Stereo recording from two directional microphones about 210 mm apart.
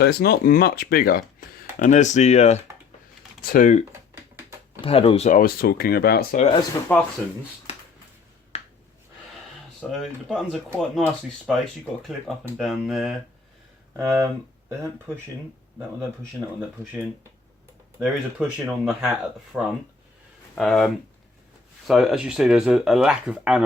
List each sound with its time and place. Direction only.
0.0 s speech: 50° left (ahead or behind)
4.8 s speech: 25° left (ahead or behind); by 6.4 s 45° left (ahead or behind)
6.4 s speech: 25° left (ahead or behind)
6.9 s speech: 5° left (ahead or behind)
8.5 s a sound: 30° left (ahead or behind)
9.9 s speech: centre (ahead or behind)
13.9 s speech: 15° right (ahead or behind)
18.0 s speech: 5° right (ahead or behind)